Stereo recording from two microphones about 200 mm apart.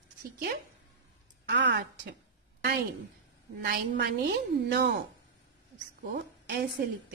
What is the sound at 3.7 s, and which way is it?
Speech, 50° right (ahead or behind).